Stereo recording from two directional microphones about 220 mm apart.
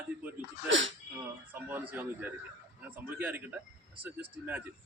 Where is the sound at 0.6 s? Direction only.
60° right (ahead or behind).